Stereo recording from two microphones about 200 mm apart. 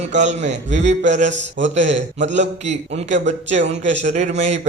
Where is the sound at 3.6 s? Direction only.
65° right (ahead or behind).